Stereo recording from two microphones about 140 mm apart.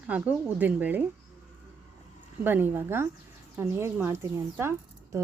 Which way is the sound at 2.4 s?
15° right (ahead or behind).